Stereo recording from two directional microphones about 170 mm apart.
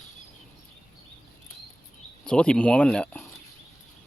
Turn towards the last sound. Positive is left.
turn(degrees=5)  # may be behind; listen again after turning